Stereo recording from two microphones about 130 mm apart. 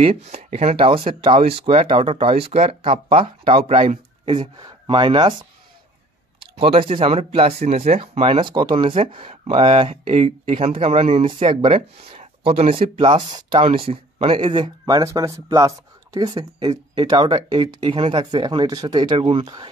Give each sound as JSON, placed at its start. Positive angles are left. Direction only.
{"t": 0.0, "sound": "speech", "side_deg": -55}
{"t": 0.7, "sound": "speech", "side_deg": -45}
{"t": 6.5, "sound": "speech", "side_deg": -45}
{"t": 8.4, "sound": "speech", "side_deg": -35}
{"t": 9.8, "sound": "speech", "side_deg": -50}